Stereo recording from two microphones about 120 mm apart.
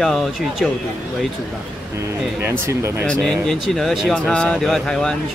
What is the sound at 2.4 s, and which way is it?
Speech, 20° right (ahead or behind).